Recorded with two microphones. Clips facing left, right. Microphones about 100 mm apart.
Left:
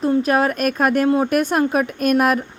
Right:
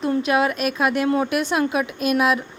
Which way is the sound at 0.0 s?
40° left (ahead or behind).